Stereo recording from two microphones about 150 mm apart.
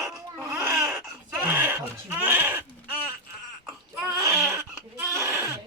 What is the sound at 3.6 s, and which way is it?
Baby cry, 10° right (ahead or behind).